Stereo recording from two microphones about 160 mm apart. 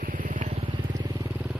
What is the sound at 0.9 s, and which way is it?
Vehicle, 20° right (ahead or behind).